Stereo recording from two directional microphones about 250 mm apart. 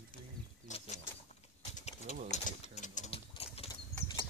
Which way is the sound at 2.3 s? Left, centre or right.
Left.